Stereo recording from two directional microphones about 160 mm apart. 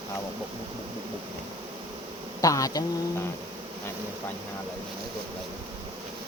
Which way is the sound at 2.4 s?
20° left (ahead or behind).